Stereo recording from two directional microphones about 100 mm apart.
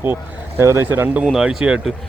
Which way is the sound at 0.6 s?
25° right (ahead or behind).